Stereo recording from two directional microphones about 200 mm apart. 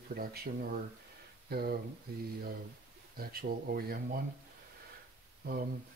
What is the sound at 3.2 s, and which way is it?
Speech, 50° right (ahead or behind).